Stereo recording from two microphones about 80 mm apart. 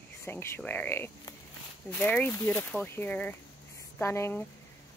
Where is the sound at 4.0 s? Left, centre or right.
Left.